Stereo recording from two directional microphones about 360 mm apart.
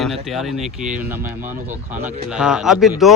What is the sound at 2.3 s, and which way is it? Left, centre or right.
Speech, centre.